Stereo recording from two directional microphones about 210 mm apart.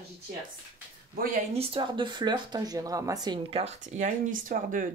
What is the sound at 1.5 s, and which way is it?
Speech, 25° right (ahead or behind).